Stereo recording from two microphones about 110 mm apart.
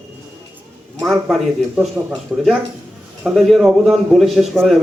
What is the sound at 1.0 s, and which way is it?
Speech, 10° right (ahead or behind).